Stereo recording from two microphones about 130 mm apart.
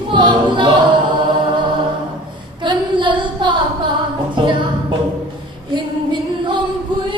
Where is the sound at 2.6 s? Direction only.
35° right (ahead or behind).